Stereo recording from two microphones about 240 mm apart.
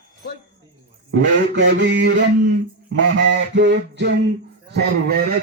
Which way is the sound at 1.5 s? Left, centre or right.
Right.